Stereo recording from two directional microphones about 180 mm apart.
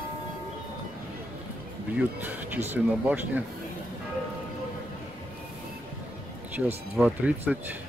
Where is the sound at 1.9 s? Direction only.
10° right (ahead or behind).